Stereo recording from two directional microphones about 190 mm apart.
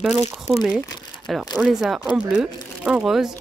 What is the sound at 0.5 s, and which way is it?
Speech, centre (ahead or behind).